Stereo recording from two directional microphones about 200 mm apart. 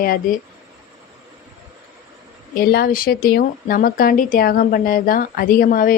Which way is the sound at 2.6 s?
50° left (ahead or behind).